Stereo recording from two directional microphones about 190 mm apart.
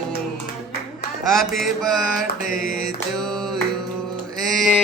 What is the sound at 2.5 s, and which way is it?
Mantra, 50° left (ahead or behind).